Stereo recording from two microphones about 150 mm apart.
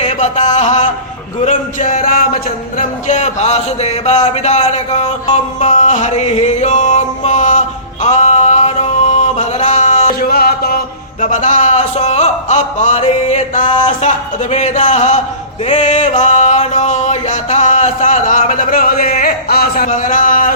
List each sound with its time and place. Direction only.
0.0 s mantra: 50° left (ahead or behind)
1.4 s music: 55° left (ahead or behind)
10.2 s a sound: 90° left; by 15.2 s 50° left (ahead or behind)
15.6 s music: 50° left (ahead or behind)